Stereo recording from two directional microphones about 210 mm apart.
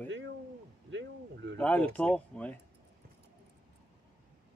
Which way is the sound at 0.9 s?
60° right (ahead or behind).